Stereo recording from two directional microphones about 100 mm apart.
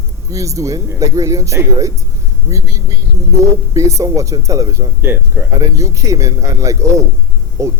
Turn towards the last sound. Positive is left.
turn(degrees=-30)  # may be behind; listen again after turning